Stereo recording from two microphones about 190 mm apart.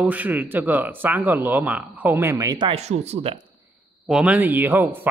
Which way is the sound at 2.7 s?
35° right (ahead or behind).